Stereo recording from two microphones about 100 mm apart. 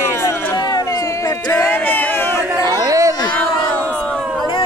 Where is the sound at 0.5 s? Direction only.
40° left (ahead or behind).